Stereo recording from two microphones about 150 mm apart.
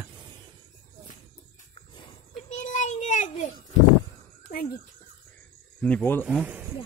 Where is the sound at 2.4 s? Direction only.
55° left (ahead or behind).